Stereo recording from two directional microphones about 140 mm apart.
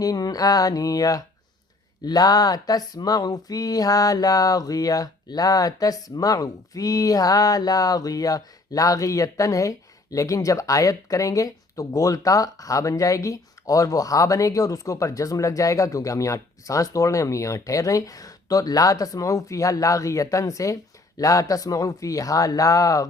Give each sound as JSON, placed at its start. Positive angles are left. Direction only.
{"t": 0.0, "sound": "speech", "side_deg": 25}